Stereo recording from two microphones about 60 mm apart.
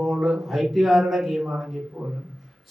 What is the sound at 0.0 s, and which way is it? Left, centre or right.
A man's voice, centre.